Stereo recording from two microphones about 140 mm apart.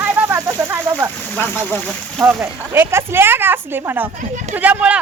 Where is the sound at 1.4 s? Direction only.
15° left (ahead or behind).